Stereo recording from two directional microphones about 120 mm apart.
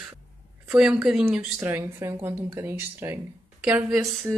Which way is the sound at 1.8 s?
20° right (ahead or behind).